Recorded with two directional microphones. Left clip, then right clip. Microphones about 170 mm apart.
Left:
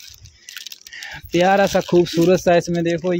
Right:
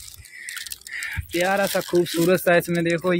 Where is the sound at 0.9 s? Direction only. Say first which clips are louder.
Right 4 dB; 25° left (ahead or behind).